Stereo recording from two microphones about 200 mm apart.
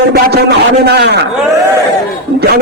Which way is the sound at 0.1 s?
55° right (ahead or behind).